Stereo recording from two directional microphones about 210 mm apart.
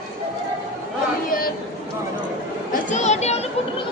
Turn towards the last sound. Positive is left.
turn(degrees=30)  # may be behind; listen again after turning